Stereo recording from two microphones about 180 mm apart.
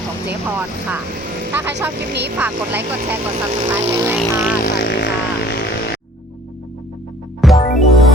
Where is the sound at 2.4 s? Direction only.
10° right (ahead or behind).